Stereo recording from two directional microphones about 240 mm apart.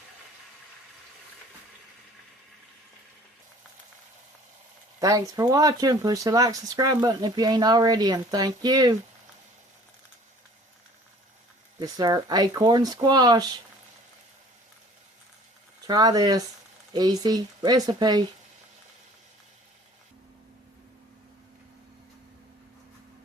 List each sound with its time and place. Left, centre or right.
4.9 s speech: centre
11.9 s speech: centre
15.9 s speech: centre